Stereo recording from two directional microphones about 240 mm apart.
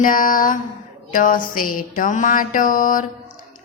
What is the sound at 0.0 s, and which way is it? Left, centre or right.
Music, left.